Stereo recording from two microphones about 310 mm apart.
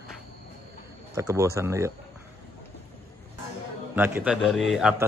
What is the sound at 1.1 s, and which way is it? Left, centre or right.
Speech, centre.